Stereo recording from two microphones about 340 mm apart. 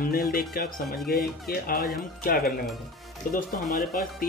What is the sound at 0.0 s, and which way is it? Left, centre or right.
Speech, left.